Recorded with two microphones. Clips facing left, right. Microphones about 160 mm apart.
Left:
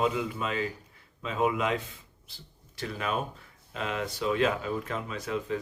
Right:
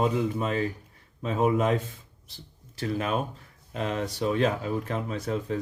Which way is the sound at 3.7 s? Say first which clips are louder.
Right 3 dB; 40° right (ahead or behind).